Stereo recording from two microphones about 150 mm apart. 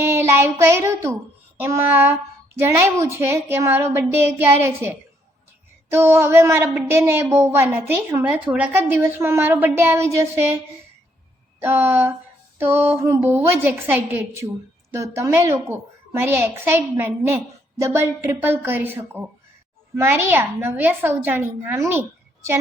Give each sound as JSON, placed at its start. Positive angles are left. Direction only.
{"t": 0.0, "sound": "child singing", "side_deg": -15}
{"t": 1.5, "sound": "a woman's voice", "side_deg": -15}
{"t": 11.6, "sound": "a woman's voice", "side_deg": -15}